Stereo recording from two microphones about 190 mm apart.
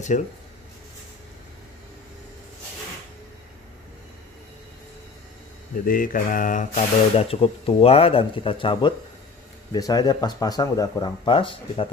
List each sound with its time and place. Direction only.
0.1 s speech: 40° left (ahead or behind)
5.9 s speech: 45° left (ahead or behind); by 11.9 s 30° left (ahead or behind)